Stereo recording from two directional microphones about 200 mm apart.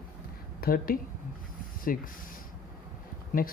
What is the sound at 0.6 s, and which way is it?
A woman's voice, 45° left (ahead or behind).